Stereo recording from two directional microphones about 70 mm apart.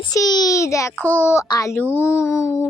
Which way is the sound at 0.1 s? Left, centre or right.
Left.